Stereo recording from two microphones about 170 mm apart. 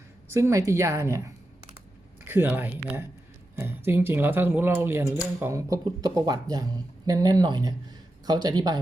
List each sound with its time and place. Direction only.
0.3 s speech: 15° right (ahead or behind)
2.2 s speech: 10° right (ahead or behind)